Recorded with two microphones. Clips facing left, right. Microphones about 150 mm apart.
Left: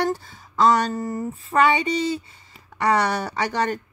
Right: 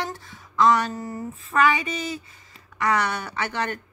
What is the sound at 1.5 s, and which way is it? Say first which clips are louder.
A woman's voice: left 3 dB; 30° left (ahead or behind).